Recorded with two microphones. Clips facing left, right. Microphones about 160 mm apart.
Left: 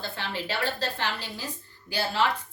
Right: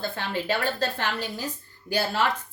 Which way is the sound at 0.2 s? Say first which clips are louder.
Right 3 dB; 50° right (ahead or behind).